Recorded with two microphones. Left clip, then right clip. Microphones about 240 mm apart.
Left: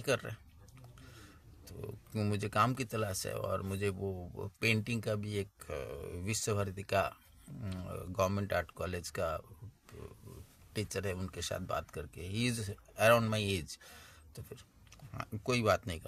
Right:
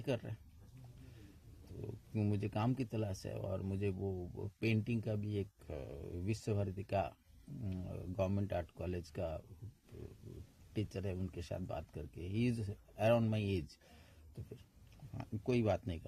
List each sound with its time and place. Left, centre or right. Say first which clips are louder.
0.0 s speech: left 7 dB; left
2.1 s speech: left 8 dB; left
10.9 s speech: left 6 dB; left
15.1 s speech: left 3 dB; left